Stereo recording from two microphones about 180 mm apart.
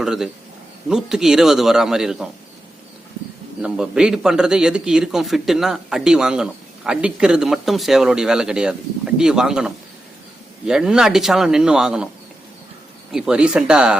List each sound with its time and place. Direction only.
0.0 s a man's voice: centre (ahead or behind)
3.6 s a man's voice: 5° right (ahead or behind)
13.1 s a man's voice: 5° right (ahead or behind)